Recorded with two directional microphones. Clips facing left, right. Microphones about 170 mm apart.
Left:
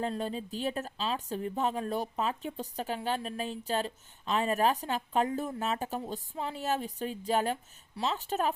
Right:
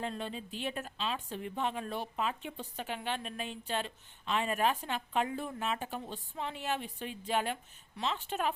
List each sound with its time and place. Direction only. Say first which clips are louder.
0.0 s a woman's voice: left 5 dB; 40° left (ahead or behind)